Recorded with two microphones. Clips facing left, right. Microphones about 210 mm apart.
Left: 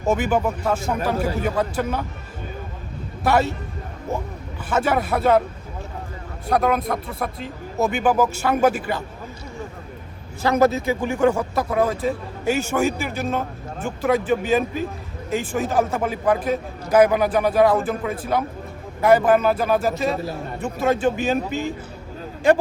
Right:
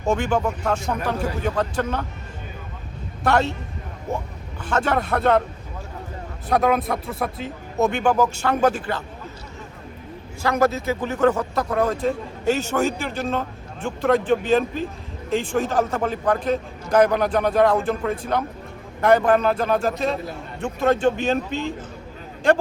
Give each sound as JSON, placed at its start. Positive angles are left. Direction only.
{"t": 0.0, "sound": "speech", "side_deg": 5}
{"t": 3.2, "sound": "speech", "side_deg": 5}
{"t": 4.7, "sound": "speech", "side_deg": 5}
{"t": 6.5, "sound": "speech", "side_deg": 0}
{"t": 10.4, "sound": "speech", "side_deg": 20}